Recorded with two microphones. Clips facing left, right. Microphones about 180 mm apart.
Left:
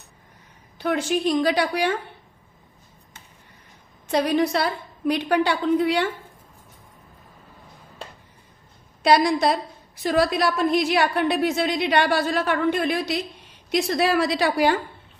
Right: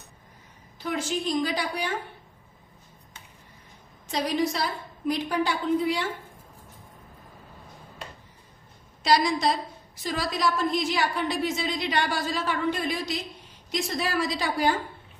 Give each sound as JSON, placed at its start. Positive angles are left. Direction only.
{"t": 0.8, "sound": "a woman's voice", "side_deg": 65}
{"t": 4.1, "sound": "a woman's voice", "side_deg": 60}
{"t": 9.0, "sound": "a woman's voice", "side_deg": 60}